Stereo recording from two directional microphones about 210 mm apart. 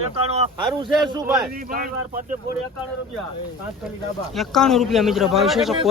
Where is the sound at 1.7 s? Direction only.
40° right (ahead or behind).